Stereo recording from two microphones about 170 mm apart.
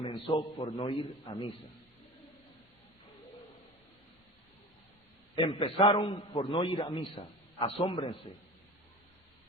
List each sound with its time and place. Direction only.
0.0 s a man's voice: 30° left (ahead or behind)
5.3 s a man's voice: 30° left (ahead or behind)